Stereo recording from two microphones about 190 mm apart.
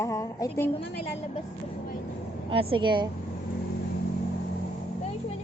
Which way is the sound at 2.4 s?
25° right (ahead or behind).